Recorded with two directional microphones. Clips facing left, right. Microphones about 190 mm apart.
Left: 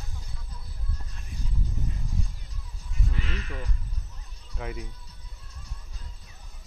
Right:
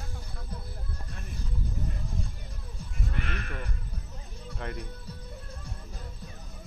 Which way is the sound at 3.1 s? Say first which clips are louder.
Even; 55° right (ahead or behind).